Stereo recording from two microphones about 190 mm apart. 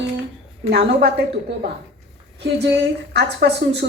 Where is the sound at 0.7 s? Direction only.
55° right (ahead or behind).